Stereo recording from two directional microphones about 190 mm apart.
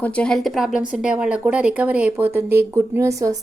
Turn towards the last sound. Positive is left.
turn(degrees=-15)  # may be behind; listen again after turning